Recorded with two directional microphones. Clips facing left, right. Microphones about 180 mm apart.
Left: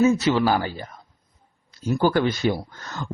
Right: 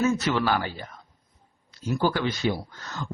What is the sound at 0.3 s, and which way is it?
Speech, 35° left (ahead or behind).